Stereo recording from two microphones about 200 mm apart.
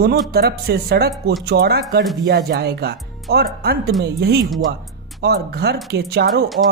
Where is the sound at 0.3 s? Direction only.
55° right (ahead or behind).